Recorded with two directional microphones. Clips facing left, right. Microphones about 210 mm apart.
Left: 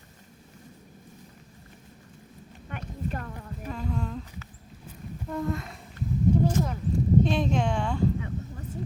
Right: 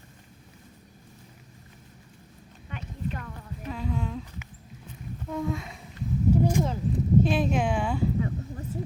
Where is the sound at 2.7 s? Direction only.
50° left (ahead or behind).